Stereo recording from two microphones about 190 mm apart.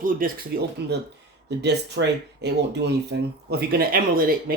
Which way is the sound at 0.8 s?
60° right (ahead or behind).